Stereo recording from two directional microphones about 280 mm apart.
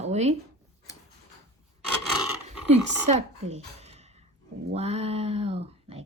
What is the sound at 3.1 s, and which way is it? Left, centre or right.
A woman's voice, right.